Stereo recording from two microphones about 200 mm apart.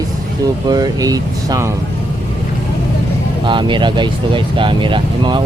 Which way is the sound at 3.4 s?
25° right (ahead or behind).